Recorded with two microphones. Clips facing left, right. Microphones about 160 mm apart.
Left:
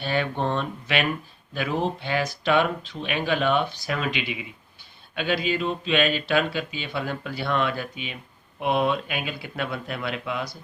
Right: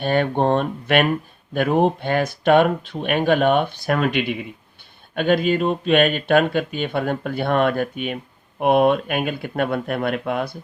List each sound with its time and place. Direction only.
0.0 s speech: 50° right (ahead or behind)